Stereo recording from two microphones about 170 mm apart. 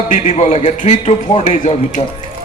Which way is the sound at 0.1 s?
45° left (ahead or behind).